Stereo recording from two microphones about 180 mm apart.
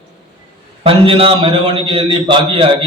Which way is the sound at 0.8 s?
30° right (ahead or behind).